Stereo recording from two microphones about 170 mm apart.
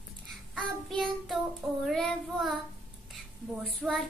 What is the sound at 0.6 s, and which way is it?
Child singing, centre (ahead or behind).